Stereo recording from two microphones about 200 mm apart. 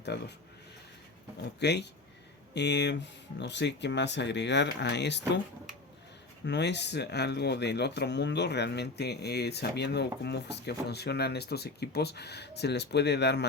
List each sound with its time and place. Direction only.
0.0 s speech: 55° left (ahead or behind)
1.5 s speech: 55° left (ahead or behind)
6.4 s speech: 60° left (ahead or behind)